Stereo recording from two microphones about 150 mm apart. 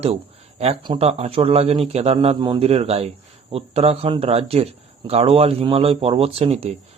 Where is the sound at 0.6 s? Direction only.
35° right (ahead or behind).